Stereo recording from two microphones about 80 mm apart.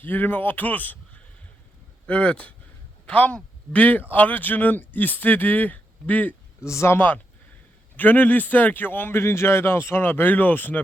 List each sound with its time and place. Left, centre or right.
0.0 s speech: left
6.6 s speech: left